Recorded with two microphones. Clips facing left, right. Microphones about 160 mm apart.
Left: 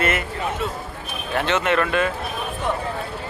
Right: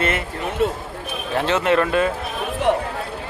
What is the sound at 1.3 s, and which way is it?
Speech, 30° right (ahead or behind).